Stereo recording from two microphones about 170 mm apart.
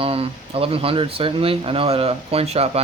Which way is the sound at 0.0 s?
35° right (ahead or behind).